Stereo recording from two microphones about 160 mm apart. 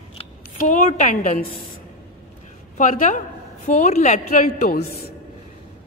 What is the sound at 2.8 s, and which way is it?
A woman's voice, 55° left (ahead or behind).